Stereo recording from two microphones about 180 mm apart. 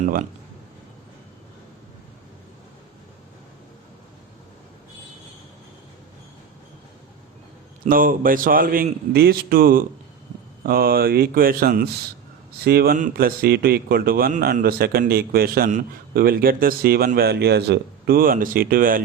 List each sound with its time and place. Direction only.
0.0 s speech: 50° right (ahead or behind)
7.9 s a man's voice: 50° right (ahead or behind)